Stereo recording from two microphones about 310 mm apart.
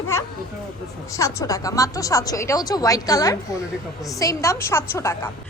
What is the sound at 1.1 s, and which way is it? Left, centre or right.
A woman's voice, centre.